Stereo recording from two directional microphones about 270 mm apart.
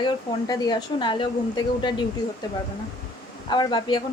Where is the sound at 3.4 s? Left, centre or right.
Centre.